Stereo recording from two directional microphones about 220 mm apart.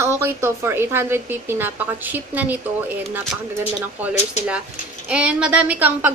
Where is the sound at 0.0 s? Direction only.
10° right (ahead or behind).